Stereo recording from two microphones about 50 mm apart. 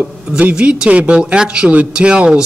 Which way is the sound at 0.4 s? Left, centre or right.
Right.